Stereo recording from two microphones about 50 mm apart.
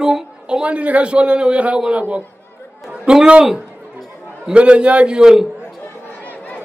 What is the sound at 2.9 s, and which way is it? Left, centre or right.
Chatter, centre.